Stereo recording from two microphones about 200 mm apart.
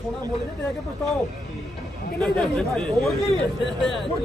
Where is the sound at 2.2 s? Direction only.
Centre (ahead or behind).